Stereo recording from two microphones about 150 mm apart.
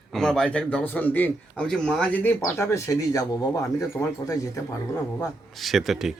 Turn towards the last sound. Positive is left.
turn(degrees=0)  # may be behind; listen again after turning